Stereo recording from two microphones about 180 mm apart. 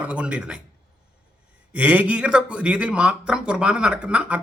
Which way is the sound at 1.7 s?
10° right (ahead or behind).